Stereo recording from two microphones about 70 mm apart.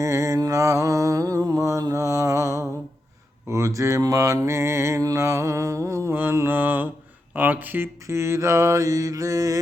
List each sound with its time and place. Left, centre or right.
0.0 s mantra: right
6.1 s mantra: right
8.0 s mantra: right